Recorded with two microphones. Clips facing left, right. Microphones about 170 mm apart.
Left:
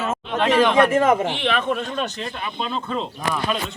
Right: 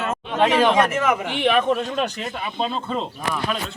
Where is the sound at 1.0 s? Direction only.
40° left (ahead or behind).